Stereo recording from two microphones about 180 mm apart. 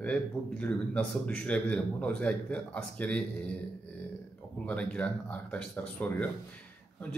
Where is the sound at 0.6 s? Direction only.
5° left (ahead or behind).